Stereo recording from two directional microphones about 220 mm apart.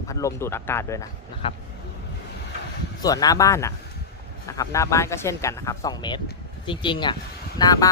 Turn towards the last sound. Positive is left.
turn(degrees=15)  # may be behind; listen again after turning